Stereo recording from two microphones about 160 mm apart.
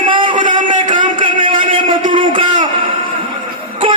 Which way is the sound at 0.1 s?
30° right (ahead or behind).